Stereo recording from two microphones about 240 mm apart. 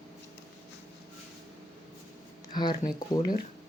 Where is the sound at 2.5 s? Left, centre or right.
Centre.